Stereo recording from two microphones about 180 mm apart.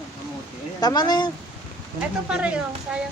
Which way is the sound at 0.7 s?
20° left (ahead or behind).